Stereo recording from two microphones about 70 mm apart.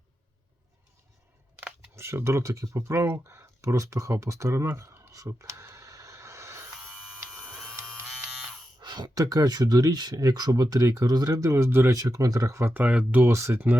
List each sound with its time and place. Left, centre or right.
2.0 s speech: right
5.1 s a sound: right
8.8 s a sound: right
9.3 s speech: right
11.0 s speech: right
11.5 s speech: right
11.9 s speech: right
12.9 s speech: centre
13.2 s speech: right